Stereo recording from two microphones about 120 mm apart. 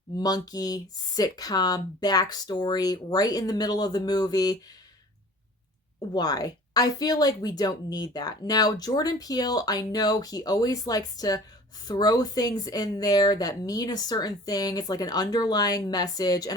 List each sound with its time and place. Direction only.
0.2 s speech: 35° left (ahead or behind)
6.1 s speech: 35° left (ahead or behind)